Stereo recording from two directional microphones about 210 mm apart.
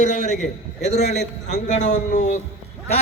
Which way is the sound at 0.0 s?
35° left (ahead or behind).